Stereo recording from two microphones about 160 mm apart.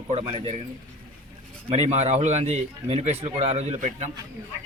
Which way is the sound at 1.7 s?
45° right (ahead or behind).